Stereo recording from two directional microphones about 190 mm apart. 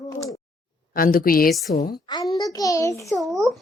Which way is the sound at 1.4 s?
Centre (ahead or behind).